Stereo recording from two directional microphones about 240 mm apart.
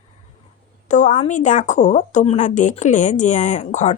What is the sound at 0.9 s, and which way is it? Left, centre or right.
A woman's voice, left.